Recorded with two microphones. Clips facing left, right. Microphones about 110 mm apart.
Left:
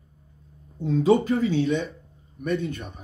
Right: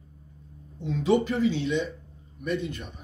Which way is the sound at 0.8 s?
35° left (ahead or behind).